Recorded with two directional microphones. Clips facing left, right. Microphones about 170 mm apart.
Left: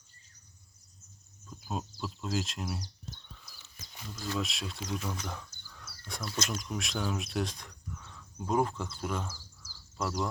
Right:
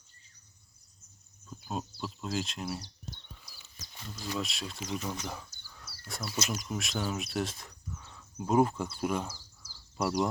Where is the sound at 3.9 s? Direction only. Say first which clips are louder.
Left 1 dB; centre (ahead or behind).